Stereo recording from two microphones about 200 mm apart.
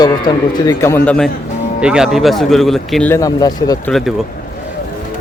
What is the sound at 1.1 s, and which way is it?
Speech, 5° left (ahead or behind).